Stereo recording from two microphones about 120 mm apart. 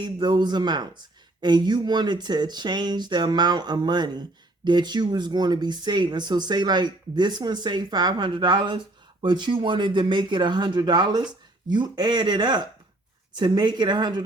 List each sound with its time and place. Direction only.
0.0 s speech: 40° right (ahead or behind)